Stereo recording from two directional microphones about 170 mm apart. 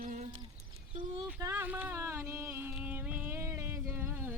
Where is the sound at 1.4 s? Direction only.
15° right (ahead or behind).